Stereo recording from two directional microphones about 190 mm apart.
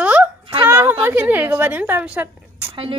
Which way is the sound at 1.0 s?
10° right (ahead or behind).